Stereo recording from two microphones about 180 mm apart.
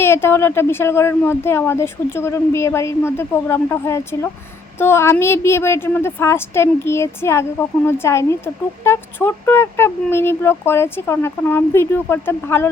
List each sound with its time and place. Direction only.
0.0 s speech: 15° left (ahead or behind)